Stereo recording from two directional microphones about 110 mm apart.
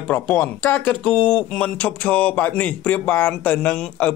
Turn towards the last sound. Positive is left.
turn(degrees=10)  # may be behind; listen again after turning